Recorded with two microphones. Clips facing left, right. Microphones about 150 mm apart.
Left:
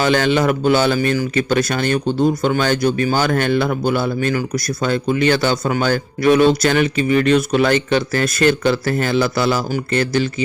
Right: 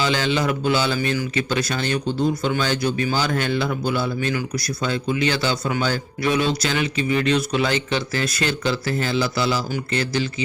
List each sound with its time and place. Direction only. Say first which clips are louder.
0.0 s speech: left 6 dB; 55° left (ahead or behind)